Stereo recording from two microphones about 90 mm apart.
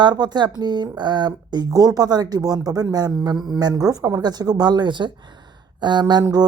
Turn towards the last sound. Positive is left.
turn(degrees=-55)  # may be behind; listen again after turning